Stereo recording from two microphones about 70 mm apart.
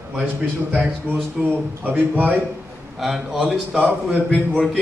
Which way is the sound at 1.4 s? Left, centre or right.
Centre.